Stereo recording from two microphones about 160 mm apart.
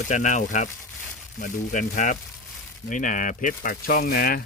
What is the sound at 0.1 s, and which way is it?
Speech, 50° left (ahead or behind).